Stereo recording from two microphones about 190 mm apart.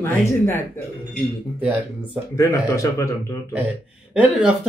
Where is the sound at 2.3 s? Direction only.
15° left (ahead or behind).